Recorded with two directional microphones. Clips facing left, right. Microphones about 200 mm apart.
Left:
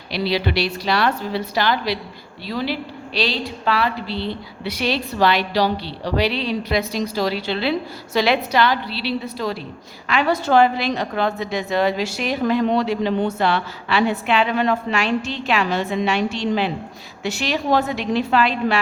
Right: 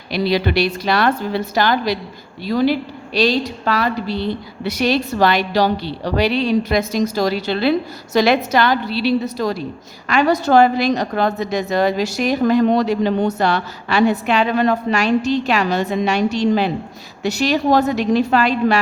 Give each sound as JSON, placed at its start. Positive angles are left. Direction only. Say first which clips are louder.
{"t": 0.1, "sound": "a woman's voice", "louder": "right 4 dB", "side_deg": -45}